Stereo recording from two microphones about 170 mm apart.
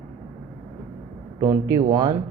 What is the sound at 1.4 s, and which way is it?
Speech, 15° right (ahead or behind).